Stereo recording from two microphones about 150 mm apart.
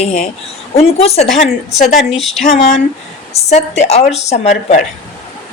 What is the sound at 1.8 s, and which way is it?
Speech, centre (ahead or behind).